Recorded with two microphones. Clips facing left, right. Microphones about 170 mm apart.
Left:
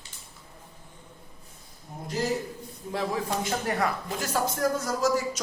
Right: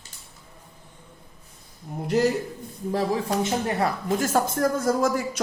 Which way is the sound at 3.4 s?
30° right (ahead or behind).